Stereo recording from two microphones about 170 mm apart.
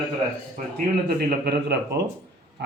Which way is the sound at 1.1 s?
65° right (ahead or behind).